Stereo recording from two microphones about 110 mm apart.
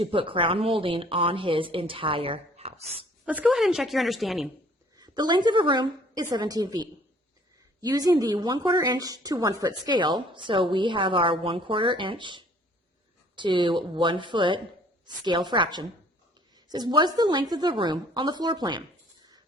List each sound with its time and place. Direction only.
0.0 s a woman's voice: 55° right (ahead or behind)
3.2 s a woman's voice: 10° right (ahead or behind)
4.9 s a woman's voice: 40° right (ahead or behind)